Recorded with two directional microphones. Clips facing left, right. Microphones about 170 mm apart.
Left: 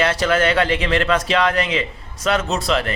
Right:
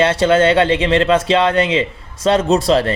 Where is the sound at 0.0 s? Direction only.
30° right (ahead or behind).